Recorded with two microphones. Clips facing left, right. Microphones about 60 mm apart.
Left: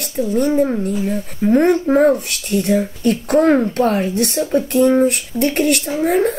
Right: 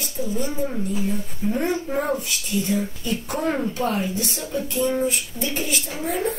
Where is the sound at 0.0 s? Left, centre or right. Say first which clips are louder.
Left 9 dB; left.